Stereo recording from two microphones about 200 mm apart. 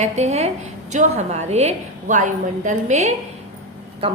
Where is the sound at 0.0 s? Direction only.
35° right (ahead or behind).